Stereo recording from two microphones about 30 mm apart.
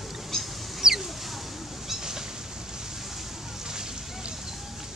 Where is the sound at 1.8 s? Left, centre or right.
Centre.